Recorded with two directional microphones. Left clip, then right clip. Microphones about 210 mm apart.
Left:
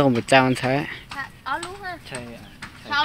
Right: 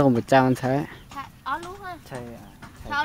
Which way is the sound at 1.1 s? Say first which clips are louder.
Left 1 dB; 45° right (ahead or behind).